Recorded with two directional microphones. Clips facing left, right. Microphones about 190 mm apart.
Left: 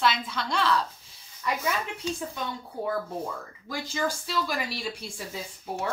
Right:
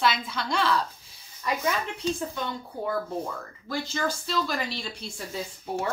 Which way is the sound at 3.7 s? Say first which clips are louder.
Right 1 dB; 10° left (ahead or behind).